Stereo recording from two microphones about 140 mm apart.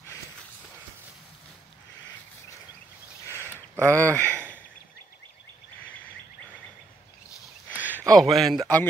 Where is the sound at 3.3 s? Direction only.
15° left (ahead or behind).